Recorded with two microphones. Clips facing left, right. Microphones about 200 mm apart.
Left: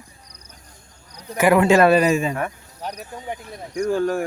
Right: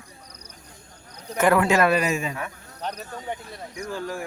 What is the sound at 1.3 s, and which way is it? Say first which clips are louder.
Speech: left 3 dB; 10° left (ahead or behind).